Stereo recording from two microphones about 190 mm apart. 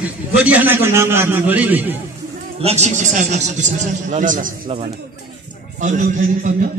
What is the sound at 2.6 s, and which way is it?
A man's voice, 35° right (ahead or behind).